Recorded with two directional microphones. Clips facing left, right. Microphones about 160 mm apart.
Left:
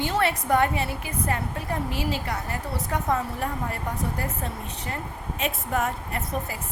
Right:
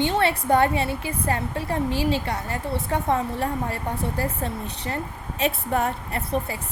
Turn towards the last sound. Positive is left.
turn(degrees=-30)  # may be behind; listen again after turning